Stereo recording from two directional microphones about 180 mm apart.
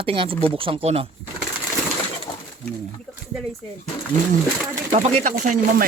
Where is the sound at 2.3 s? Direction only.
30° left (ahead or behind).